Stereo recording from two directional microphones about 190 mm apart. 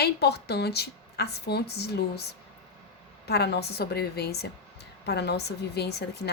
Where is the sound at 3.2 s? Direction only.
60° left (ahead or behind).